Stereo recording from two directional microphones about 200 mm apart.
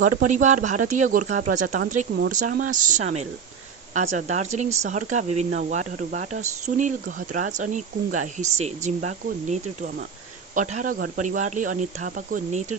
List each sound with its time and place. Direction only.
0.0 s speech: 40° right (ahead or behind)